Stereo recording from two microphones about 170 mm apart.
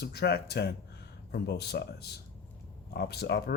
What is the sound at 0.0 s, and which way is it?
Speech, 70° left (ahead or behind).